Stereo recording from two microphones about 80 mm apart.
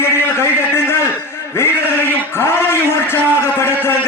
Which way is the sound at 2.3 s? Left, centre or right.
Left.